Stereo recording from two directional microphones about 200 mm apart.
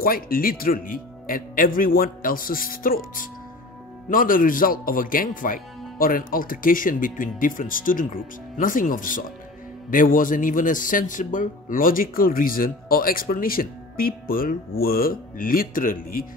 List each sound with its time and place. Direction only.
0.0 s a man's voice: 45° left (ahead or behind)